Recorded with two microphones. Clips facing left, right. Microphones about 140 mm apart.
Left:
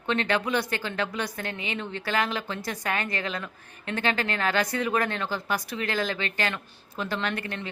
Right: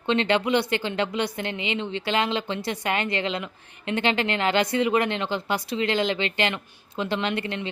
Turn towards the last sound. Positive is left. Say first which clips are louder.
# right 4 dB
turn(degrees=-25)  # may be behind; listen again after turning